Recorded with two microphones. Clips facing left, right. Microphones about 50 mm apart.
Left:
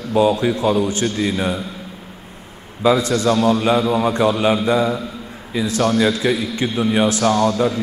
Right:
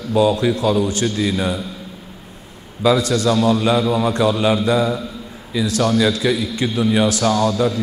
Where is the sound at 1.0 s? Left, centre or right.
Centre.